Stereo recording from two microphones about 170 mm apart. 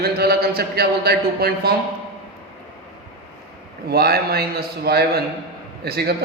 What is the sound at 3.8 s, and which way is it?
A man's voice, 65° right (ahead or behind).